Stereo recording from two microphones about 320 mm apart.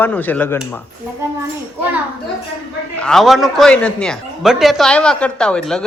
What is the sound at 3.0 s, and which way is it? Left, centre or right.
Speech, centre.